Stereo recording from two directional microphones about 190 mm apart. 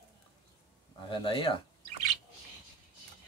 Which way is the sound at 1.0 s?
25° left (ahead or behind).